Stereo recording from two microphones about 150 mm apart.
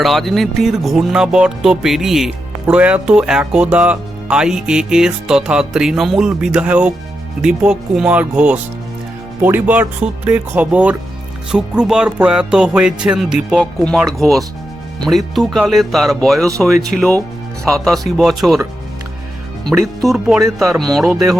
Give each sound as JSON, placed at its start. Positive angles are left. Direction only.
{"t": 0.0, "sound": "speech", "side_deg": 0}
{"t": 19.7, "sound": "speech", "side_deg": -10}
{"t": 20.4, "sound": "speech", "side_deg": -20}
{"t": 20.7, "sound": "speech", "side_deg": 0}